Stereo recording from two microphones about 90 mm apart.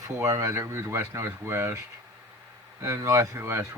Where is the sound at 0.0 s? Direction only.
35° right (ahead or behind).